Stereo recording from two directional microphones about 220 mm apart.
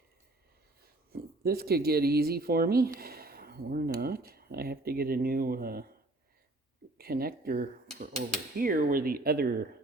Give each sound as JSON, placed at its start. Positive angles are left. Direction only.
{"t": 1.1, "sound": "speech", "side_deg": -45}
{"t": 3.0, "sound": "a sound", "side_deg": -45}
{"t": 4.0, "sound": "speech", "side_deg": -45}
{"t": 7.0, "sound": "speech", "side_deg": -45}